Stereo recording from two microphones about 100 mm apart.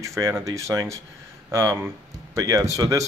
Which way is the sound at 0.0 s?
30° right (ahead or behind).